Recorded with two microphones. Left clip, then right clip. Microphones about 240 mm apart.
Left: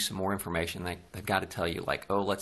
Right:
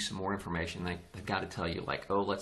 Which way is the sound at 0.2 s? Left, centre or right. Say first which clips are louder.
Left 5 dB; left.